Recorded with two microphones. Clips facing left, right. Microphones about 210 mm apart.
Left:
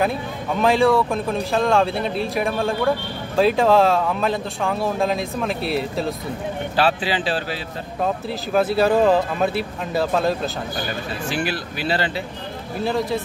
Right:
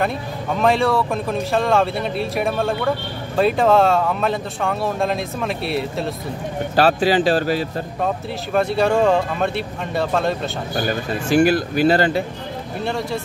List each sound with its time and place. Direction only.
0.6 s speech: centre (ahead or behind)
6.7 s speech: 45° right (ahead or behind)
8.5 s speech: centre (ahead or behind)
11.2 s speech: 45° right (ahead or behind)
12.8 s speech: centre (ahead or behind)